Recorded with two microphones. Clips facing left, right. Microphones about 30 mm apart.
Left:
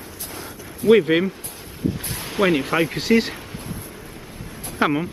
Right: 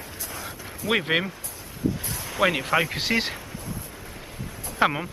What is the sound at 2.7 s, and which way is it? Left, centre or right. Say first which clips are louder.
Speech: left 4 dB; centre.